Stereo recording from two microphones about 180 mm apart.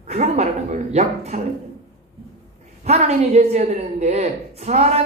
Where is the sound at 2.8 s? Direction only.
35° right (ahead or behind).